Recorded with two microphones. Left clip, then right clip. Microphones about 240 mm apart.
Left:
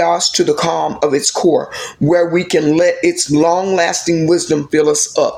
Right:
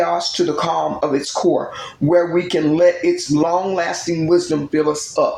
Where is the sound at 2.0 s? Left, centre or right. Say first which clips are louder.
Left 2 dB; left.